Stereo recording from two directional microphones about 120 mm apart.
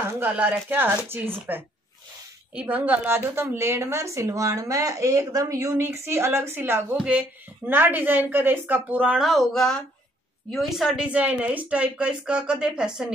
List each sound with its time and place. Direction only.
0.1 s a woman's voice: 15° right (ahead or behind)
9.2 s speech: centre (ahead or behind)